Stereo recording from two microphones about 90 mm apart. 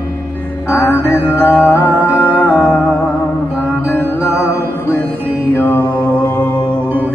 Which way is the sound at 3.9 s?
20° left (ahead or behind).